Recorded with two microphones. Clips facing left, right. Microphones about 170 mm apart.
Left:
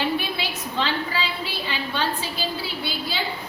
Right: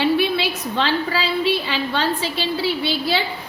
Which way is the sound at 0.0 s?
70° right (ahead or behind).